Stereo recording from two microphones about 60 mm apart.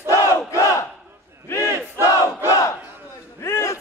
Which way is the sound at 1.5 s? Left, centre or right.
Left.